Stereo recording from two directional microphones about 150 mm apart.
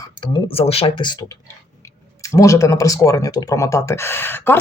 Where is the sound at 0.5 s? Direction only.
40° left (ahead or behind).